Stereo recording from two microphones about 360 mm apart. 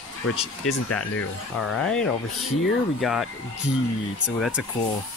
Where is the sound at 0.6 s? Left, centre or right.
Left.